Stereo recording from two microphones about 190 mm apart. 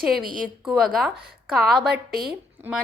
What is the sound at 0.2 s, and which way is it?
Speech, 45° right (ahead or behind).